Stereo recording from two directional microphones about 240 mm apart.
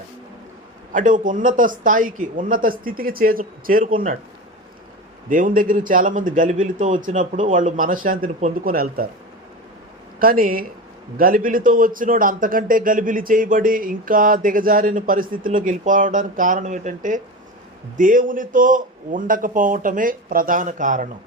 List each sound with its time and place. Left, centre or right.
0.9 s a man's voice: right
5.3 s a man's voice: right
10.2 s a man's voice: right